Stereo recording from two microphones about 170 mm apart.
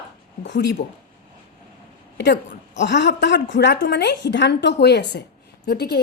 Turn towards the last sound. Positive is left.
turn(degrees=75)  # may be behind; listen again after turning